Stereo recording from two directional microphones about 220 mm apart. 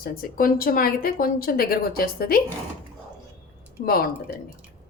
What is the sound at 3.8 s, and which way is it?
Speech, 45° left (ahead or behind).